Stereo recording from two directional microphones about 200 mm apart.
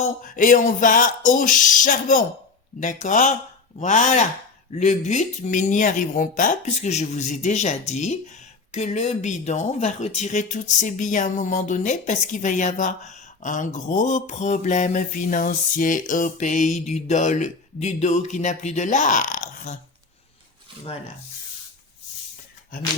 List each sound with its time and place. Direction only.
0.0 s speech: 40° left (ahead or behind)